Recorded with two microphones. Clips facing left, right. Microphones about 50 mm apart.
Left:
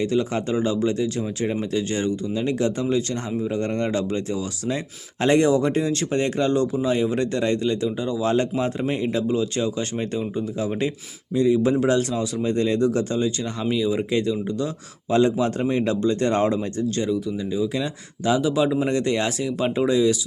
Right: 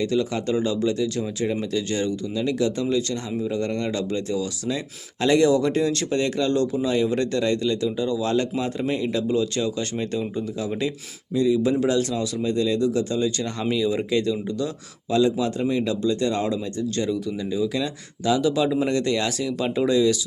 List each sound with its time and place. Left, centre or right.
0.0 s speech: left
12.5 s speech: left
13.4 s speech: centre
14.1 s speech: left
15.1 s speech: left
17.0 s speech: centre